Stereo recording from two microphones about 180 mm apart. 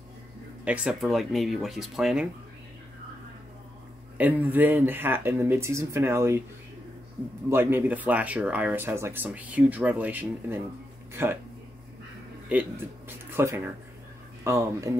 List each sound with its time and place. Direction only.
0.7 s speech: 5° right (ahead or behind)
4.2 s speech: 10° right (ahead or behind)
7.4 s speech: 10° right (ahead or behind)
12.4 s speech: 10° right (ahead or behind)